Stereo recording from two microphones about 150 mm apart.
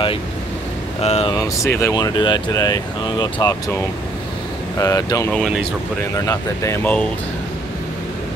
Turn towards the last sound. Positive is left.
turn(degrees=15)  # may be behind; listen again after turning